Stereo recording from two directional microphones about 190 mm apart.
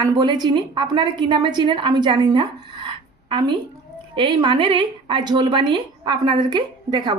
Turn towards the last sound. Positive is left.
turn(degrees=-25)  # may be behind; listen again after turning